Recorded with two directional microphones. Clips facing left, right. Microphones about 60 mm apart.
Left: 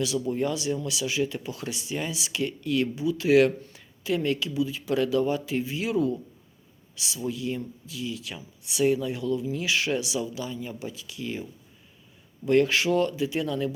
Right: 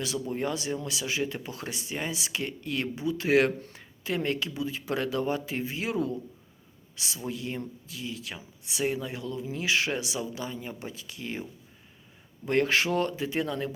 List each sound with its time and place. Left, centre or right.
0.0 s speech: right
12.5 s speech: right